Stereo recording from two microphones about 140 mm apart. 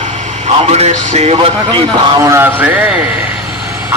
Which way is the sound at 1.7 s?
35° right (ahead or behind).